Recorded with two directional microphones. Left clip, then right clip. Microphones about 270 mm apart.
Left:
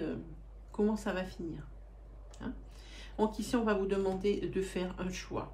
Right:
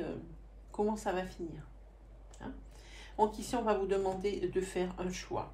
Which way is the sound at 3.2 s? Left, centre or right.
Centre.